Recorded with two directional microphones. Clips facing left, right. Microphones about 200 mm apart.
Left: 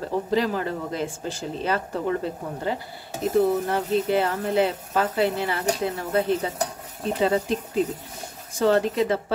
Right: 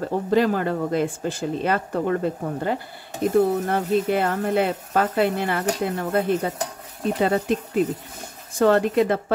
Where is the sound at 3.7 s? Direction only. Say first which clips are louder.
Right 2 dB; 55° right (ahead or behind).